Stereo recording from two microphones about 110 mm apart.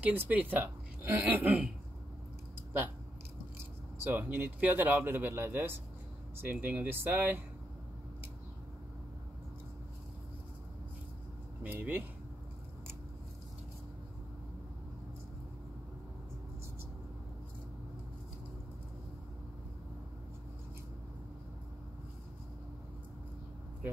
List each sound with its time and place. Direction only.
0.0 s a woman's voice: 15° right (ahead or behind)
4.1 s a woman's voice: 20° right (ahead or behind)
11.6 s a woman's voice: 15° right (ahead or behind)